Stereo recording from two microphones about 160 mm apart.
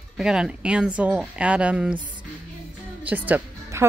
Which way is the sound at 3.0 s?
10° right (ahead or behind).